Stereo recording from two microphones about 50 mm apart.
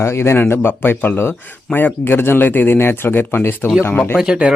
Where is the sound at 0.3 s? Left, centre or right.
Left.